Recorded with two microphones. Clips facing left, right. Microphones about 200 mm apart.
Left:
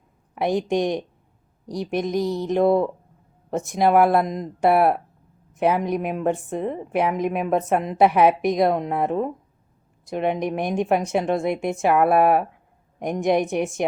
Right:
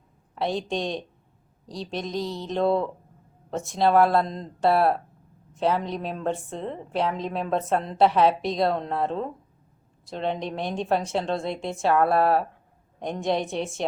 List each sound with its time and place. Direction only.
0.3 s a woman's voice: 15° left (ahead or behind)